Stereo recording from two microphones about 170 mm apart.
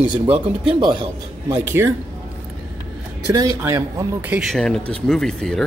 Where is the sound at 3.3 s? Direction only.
20° right (ahead or behind).